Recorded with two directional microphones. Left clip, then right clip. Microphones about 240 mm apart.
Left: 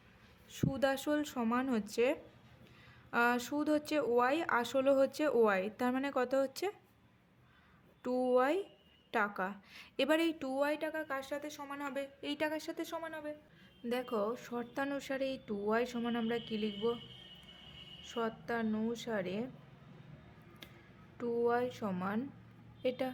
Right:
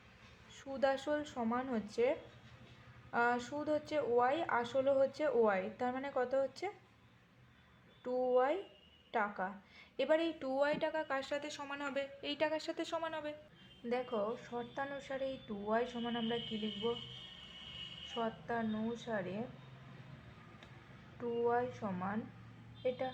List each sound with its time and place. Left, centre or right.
0.5 s a woman's voice: left
8.0 s a woman's voice: left
13.8 s speech: left
18.4 s speech: left
21.2 s speech: left